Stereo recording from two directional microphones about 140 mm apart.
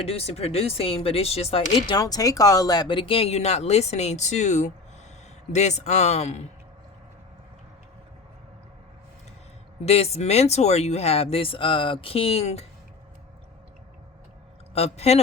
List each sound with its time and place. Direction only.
0.0 s speech: 45° left (ahead or behind)
1.9 s speech: 25° left (ahead or behind); by 6.5 s 55° left (ahead or behind)
9.8 s speech: 50° left (ahead or behind)
14.7 s speech: 50° left (ahead or behind)